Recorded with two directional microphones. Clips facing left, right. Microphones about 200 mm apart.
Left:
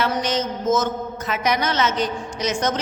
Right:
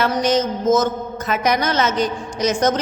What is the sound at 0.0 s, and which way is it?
A man's voice, 45° right (ahead or behind).